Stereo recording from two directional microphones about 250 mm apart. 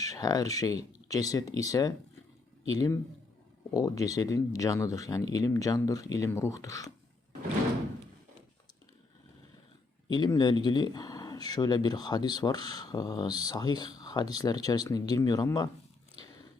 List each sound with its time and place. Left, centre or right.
0.0 s speech: centre
10.1 s speech: centre